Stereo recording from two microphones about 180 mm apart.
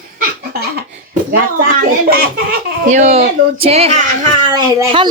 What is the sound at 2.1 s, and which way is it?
Speech, 60° right (ahead or behind).